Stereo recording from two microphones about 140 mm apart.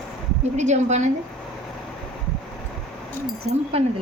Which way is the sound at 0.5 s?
55° right (ahead or behind).